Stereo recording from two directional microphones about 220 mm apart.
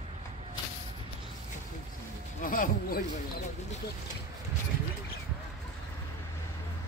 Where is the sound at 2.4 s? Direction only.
40° left (ahead or behind).